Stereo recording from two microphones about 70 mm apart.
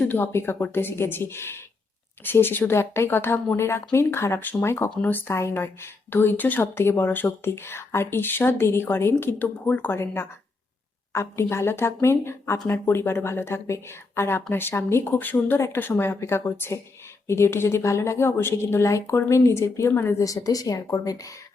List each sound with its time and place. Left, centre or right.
0.1 s speech: left
11.1 s speech: left
19.9 s speech: left
20.1 s a woman's voice: left